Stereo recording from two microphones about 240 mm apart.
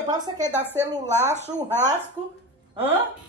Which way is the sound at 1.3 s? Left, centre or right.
Right.